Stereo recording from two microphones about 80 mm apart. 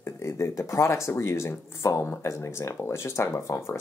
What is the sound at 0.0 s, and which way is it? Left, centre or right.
Speech, left.